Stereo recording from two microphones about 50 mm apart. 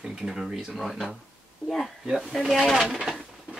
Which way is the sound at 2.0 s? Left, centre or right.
Centre.